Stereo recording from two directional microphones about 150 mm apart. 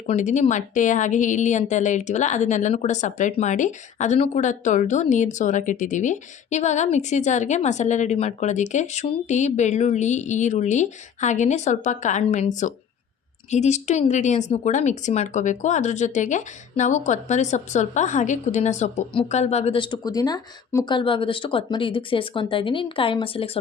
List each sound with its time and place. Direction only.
0.1 s a woman's voice: 55° left (ahead or behind); by 23.5 s 35° left (ahead or behind)